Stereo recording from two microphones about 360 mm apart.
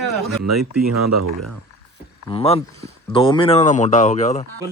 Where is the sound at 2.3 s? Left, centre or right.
Centre.